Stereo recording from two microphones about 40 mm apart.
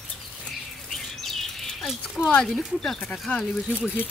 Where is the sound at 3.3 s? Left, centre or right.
Left.